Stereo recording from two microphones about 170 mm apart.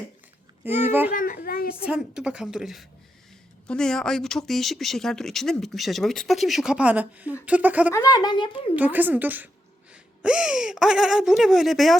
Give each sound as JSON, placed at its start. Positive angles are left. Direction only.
{"t": 0.8, "sound": "a woman's voice", "side_deg": -10}
{"t": 1.1, "sound": "a child's voice", "side_deg": 55}
{"t": 1.8, "sound": "a woman's voice", "side_deg": -5}
{"t": 7.9, "sound": "speech", "side_deg": 20}
{"t": 8.7, "sound": "a woman's voice", "side_deg": -10}